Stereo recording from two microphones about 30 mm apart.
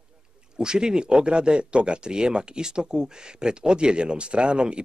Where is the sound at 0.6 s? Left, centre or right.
Right.